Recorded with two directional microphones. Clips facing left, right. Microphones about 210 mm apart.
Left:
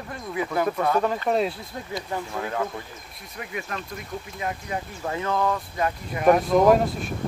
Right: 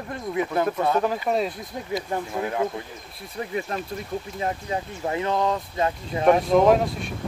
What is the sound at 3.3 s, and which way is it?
Speech, 30° right (ahead or behind).